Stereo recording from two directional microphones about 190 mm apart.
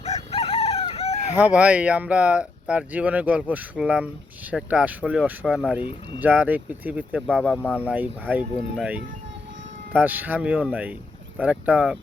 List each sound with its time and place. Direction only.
0.0 s chicken: 35° left (ahead or behind)
1.3 s speech: 5° right (ahead or behind)
7.2 s speech: 5° left (ahead or behind)
7.9 s speech: 10° right (ahead or behind)